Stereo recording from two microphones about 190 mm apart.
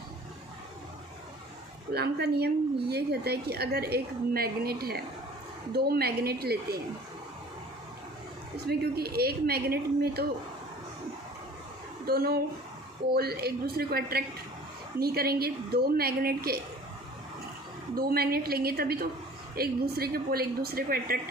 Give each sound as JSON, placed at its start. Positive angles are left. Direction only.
{"t": 1.9, "sound": "a woman's voice", "side_deg": -60}
{"t": 8.6, "sound": "a woman's voice", "side_deg": -55}
{"t": 12.0, "sound": "a woman's voice", "side_deg": -55}
{"t": 17.9, "sound": "a woman's voice", "side_deg": -55}